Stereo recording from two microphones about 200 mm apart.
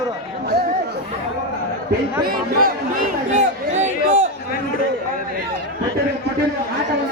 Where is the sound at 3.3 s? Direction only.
35° right (ahead or behind).